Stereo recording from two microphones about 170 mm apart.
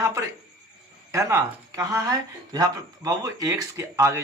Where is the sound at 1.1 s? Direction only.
20° right (ahead or behind).